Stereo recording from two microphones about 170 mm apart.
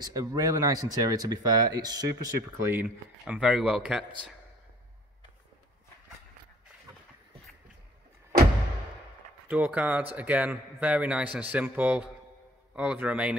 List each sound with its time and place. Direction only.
0.0 s speech: 20° right (ahead or behind); by 4.0 s 5° right (ahead or behind)
9.5 s a man's voice: 10° right (ahead or behind)